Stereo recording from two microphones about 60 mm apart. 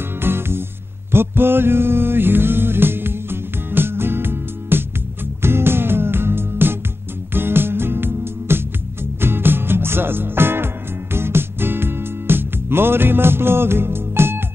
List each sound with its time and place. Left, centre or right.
0.2 s music: right